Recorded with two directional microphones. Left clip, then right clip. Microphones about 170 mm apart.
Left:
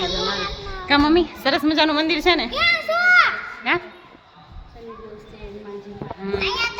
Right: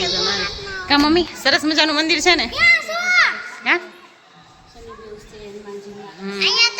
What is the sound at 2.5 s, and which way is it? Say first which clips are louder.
Children playing: right 4 dB; 55° left (ahead or behind).